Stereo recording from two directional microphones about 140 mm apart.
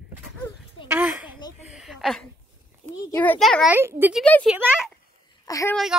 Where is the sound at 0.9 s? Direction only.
10° right (ahead or behind).